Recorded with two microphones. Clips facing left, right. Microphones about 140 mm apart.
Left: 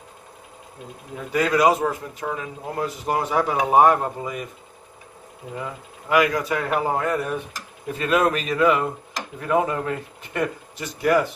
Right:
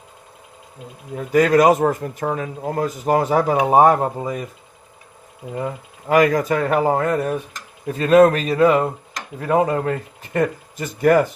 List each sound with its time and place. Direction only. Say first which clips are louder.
1.1 s speech: right 7 dB; 45° right (ahead or behind)
5.5 s speech: right 7 dB; 40° right (ahead or behind)